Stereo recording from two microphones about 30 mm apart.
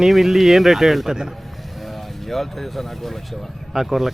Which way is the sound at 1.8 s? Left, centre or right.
Centre.